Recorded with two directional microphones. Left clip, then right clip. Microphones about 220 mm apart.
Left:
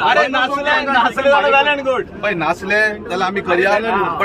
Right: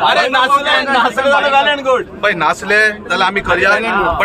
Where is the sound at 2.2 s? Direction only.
5° right (ahead or behind).